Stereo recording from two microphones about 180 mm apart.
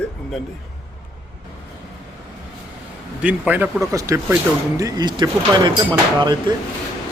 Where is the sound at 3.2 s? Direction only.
10° right (ahead or behind); by 6.5 s 25° right (ahead or behind).